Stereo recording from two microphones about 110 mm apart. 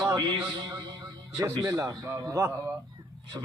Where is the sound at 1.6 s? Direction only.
30° right (ahead or behind).